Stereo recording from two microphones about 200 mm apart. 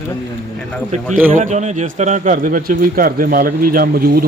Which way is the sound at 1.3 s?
40° right (ahead or behind).